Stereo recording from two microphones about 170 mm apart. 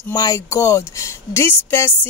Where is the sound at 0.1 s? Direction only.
20° left (ahead or behind).